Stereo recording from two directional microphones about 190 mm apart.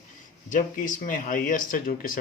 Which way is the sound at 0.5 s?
45° left (ahead or behind).